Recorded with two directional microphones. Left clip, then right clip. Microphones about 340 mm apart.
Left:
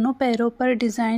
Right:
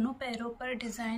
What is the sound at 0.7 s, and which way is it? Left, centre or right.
Speech, centre.